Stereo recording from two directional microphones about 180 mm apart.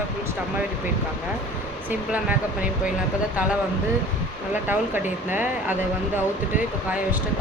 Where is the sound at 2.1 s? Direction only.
10° right (ahead or behind).